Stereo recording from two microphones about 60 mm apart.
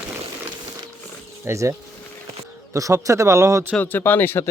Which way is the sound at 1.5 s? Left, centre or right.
Right.